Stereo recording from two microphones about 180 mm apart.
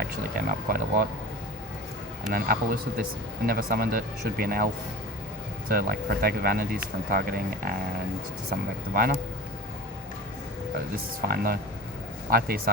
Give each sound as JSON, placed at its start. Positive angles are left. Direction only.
{"t": 0.0, "sound": "speech", "side_deg": -55}
{"t": 2.3, "sound": "speech", "side_deg": -55}
{"t": 8.9, "sound": "speech", "side_deg": -55}
{"t": 11.3, "sound": "speech", "side_deg": -55}